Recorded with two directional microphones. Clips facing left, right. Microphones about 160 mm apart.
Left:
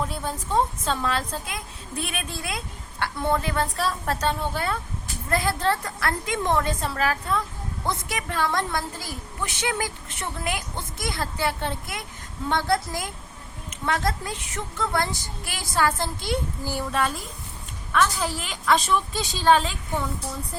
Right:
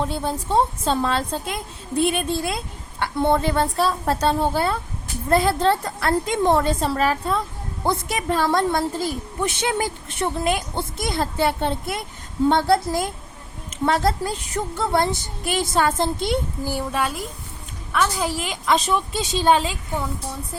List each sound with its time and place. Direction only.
0.0 s a woman's voice: 30° right (ahead or behind)
16.6 s a woman's voice: 15° right (ahead or behind)